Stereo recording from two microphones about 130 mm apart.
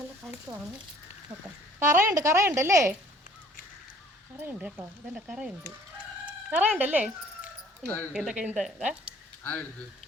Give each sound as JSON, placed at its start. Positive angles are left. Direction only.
{"t": 0.2, "sound": "a sound", "side_deg": 5}
{"t": 1.8, "sound": "a woman's voice", "side_deg": -90}
{"t": 2.2, "sound": "speech", "side_deg": -25}
{"t": 5.1, "sound": "speech", "side_deg": -5}
{"t": 6.5, "sound": "speech", "side_deg": -15}
{"t": 7.9, "sound": "speech", "side_deg": 15}
{"t": 8.1, "sound": "speech", "side_deg": -5}